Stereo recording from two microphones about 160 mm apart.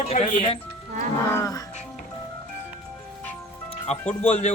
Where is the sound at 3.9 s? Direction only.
45° left (ahead or behind).